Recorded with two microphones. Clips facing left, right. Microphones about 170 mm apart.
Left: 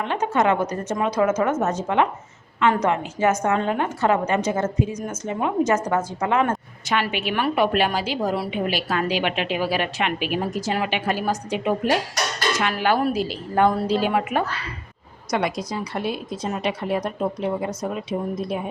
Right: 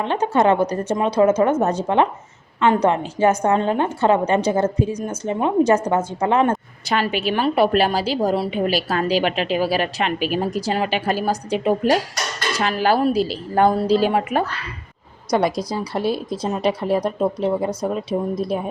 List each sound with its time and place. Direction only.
0.0 s a woman's voice: 30° right (ahead or behind)